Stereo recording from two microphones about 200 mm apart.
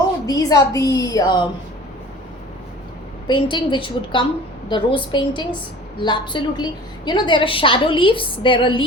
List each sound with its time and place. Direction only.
0.3 s a woman's voice: 15° left (ahead or behind)
3.2 s a woman's voice: 25° left (ahead or behind)